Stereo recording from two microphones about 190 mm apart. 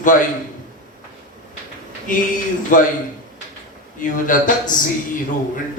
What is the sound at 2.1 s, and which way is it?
Speech, 45° left (ahead or behind).